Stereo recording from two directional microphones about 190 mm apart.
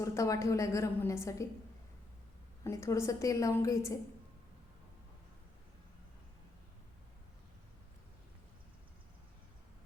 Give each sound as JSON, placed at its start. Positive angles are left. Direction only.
{"t": 0.0, "sound": "a woman's voice", "side_deg": 15}
{"t": 2.6, "sound": "a woman's voice", "side_deg": 15}